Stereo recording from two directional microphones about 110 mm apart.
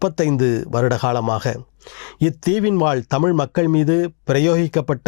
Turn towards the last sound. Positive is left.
turn(degrees=15)  # may be behind; listen again after turning